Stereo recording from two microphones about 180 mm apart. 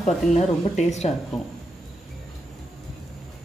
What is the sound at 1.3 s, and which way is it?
Speech, centre (ahead or behind).